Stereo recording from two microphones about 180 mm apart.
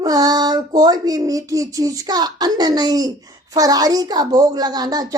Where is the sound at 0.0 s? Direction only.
20° right (ahead or behind).